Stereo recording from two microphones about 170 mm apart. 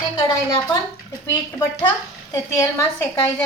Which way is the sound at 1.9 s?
15° left (ahead or behind).